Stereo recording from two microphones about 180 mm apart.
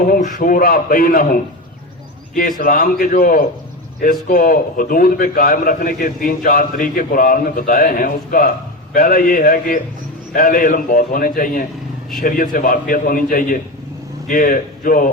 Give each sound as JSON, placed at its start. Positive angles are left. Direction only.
{"t": 0.0, "sound": "a man's voice", "side_deg": 45}